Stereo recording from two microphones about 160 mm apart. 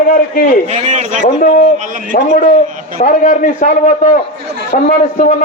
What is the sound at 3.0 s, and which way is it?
A man's voice, 55° left (ahead or behind).